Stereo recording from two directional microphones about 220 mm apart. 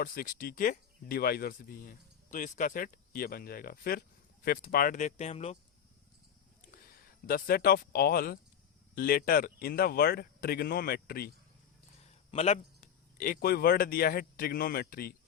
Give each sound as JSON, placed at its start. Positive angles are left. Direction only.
{"t": 0.0, "sound": "speech", "side_deg": 40}
{"t": 7.3, "sound": "speech", "side_deg": 40}
{"t": 12.3, "sound": "a man's voice", "side_deg": 30}